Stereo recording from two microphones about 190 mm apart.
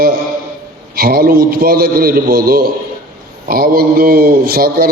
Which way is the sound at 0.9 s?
50° right (ahead or behind).